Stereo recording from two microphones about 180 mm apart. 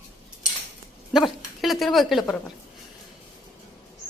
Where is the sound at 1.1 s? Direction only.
Centre (ahead or behind).